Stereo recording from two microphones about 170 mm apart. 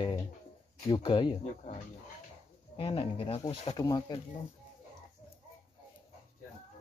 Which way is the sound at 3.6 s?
25° left (ahead or behind).